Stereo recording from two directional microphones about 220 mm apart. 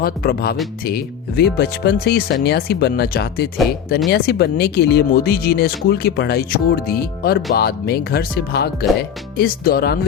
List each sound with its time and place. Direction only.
0.0 s speech: 45° left (ahead or behind)